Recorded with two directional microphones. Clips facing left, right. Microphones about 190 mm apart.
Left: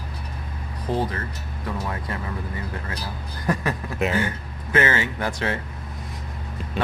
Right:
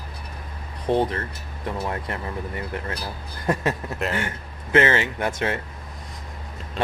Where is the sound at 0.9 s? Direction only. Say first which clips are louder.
Right 4 dB; 25° right (ahead or behind).